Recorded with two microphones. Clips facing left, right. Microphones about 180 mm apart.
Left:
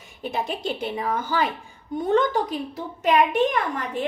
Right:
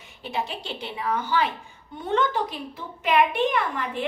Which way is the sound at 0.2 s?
50° left (ahead or behind).